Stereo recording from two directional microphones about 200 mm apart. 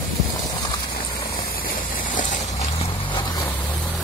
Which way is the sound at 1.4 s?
45° left (ahead or behind).